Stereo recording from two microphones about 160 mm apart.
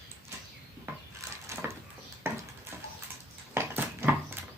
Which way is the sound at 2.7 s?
15° right (ahead or behind).